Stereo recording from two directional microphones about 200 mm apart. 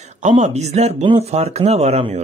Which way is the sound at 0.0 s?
35° right (ahead or behind).